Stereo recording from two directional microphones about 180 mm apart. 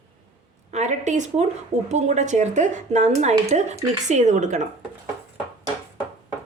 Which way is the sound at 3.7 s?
20° right (ahead or behind).